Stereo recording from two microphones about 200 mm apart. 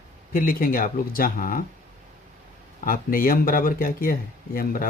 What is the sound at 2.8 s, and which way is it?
Speech, 45° left (ahead or behind).